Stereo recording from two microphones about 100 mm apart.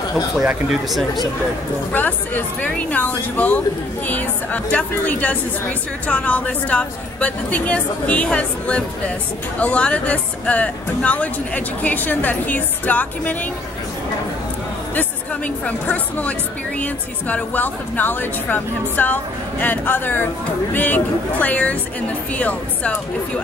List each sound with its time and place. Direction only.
0.8 s speech: centre (ahead or behind)
1.9 s speech: 15° left (ahead or behind)
15.0 s speech: 15° left (ahead or behind)